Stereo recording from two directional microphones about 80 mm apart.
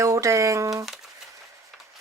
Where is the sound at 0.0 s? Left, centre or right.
Right.